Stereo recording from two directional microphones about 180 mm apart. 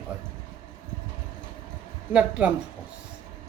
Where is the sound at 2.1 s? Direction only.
5° right (ahead or behind).